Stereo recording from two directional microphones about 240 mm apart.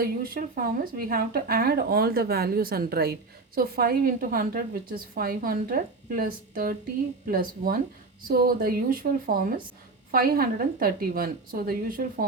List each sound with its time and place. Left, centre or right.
0.0 s a woman's voice: right